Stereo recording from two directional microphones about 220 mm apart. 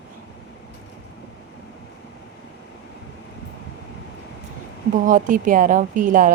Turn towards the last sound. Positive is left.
turn(degrees=-35)  # may be behind; listen again after turning